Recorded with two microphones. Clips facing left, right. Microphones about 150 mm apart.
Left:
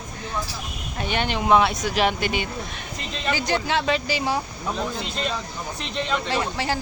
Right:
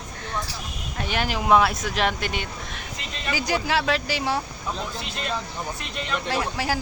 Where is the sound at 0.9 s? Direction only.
Centre (ahead or behind).